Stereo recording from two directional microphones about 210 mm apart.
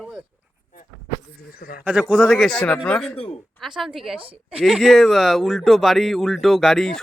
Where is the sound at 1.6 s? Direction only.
45° left (ahead or behind).